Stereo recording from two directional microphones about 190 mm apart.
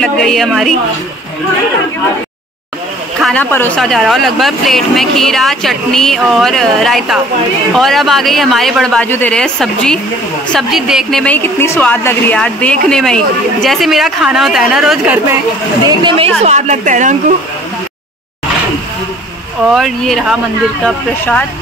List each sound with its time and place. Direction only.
0.0 s speech: centre (ahead or behind)
3.2 s a sound: centre (ahead or behind)
3.5 s speech: 5° left (ahead or behind)
15.9 s a woman's voice: 25° right (ahead or behind); by 17.1 s 40° right (ahead or behind)
19.6 s speech: centre (ahead or behind)